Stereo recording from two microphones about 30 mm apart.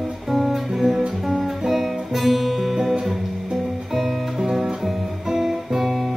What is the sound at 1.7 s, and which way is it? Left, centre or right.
Music, centre.